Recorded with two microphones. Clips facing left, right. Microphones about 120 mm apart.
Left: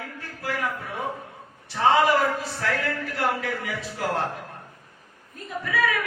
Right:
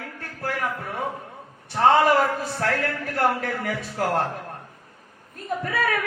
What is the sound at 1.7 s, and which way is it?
A man's voice, 55° right (ahead or behind).